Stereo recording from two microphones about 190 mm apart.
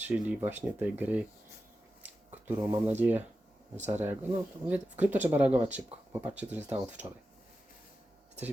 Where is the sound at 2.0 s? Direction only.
10° right (ahead or behind).